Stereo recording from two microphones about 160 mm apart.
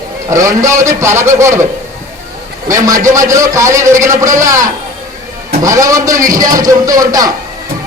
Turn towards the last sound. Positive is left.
turn(degrees=-20)  # may be behind; listen again after turning